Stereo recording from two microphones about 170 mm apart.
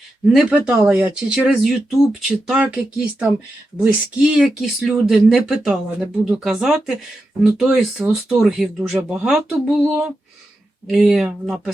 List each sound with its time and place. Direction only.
0.3 s speech: 5° right (ahead or behind)